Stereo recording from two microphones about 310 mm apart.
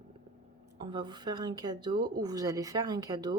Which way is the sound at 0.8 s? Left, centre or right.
Centre.